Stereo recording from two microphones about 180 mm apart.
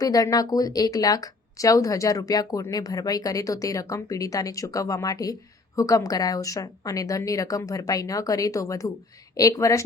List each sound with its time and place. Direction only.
0.0 s a woman's voice: 20° left (ahead or behind)